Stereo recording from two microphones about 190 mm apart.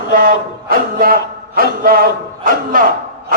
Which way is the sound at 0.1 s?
50° right (ahead or behind).